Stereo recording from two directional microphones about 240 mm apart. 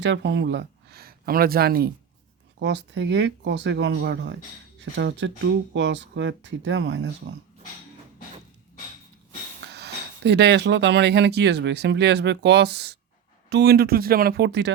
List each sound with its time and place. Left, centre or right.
0.0 s speech: right
9.7 s speech: right